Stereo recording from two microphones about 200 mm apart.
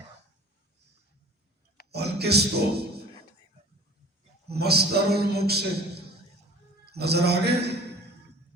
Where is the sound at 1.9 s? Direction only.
55° right (ahead or behind).